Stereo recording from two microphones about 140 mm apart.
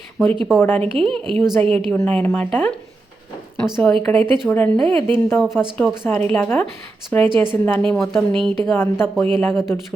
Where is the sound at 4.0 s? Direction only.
10° left (ahead or behind).